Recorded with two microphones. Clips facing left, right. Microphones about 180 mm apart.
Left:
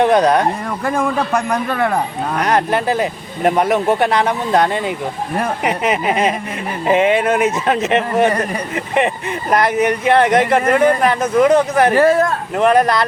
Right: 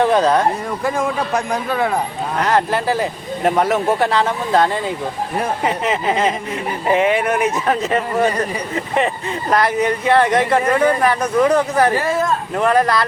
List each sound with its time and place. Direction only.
0.0 s speech: 15° left (ahead or behind)
2.4 s speech: 15° left (ahead or behind)
9.5 s speech: 20° left (ahead or behind)
12.0 s speech: 65° left (ahead or behind)
12.5 s speech: 20° left (ahead or behind)